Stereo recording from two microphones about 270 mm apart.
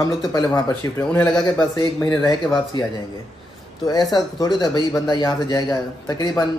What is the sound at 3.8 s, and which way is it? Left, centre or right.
Speech, centre.